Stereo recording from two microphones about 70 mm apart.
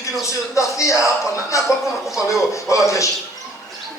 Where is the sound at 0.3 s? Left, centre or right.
Left.